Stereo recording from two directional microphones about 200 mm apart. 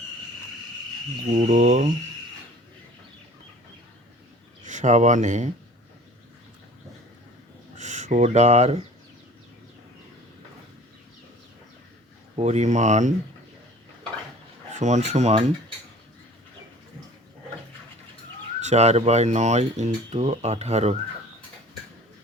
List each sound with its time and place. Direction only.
1.5 s speech: 35° right (ahead or behind)
4.6 s speech: 40° right (ahead or behind)
7.8 s speech: 35° right (ahead or behind)
12.4 s speech: 35° right (ahead or behind)
14.7 s speech: 35° right (ahead or behind)
18.6 s speech: 35° right (ahead or behind)